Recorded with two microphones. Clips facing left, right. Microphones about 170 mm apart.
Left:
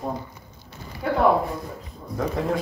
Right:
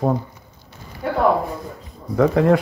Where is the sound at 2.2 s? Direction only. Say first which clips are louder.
Right 10 dB; 80° right.